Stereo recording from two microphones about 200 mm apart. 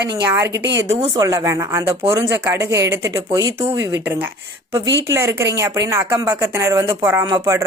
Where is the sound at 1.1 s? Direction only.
15° right (ahead or behind).